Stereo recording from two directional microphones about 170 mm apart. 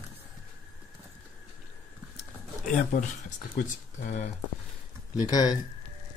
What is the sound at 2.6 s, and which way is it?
Speech, 45° left (ahead or behind).